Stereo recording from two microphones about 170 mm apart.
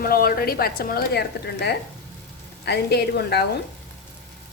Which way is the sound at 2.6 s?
75° left (ahead or behind).